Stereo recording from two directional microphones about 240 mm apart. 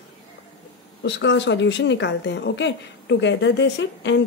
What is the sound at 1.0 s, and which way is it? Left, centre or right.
Speech, left.